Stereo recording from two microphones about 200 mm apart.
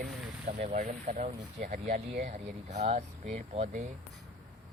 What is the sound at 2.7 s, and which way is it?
Speech, 35° right (ahead or behind).